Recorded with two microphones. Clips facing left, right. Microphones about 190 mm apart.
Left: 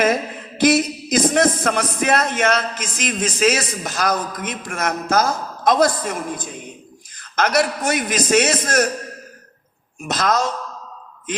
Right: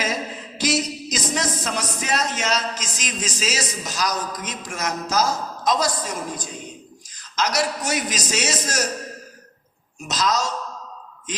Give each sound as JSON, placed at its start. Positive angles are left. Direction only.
{"t": 0.6, "sound": "a man's voice", "side_deg": 55}
{"t": 10.0, "sound": "a man's voice", "side_deg": 55}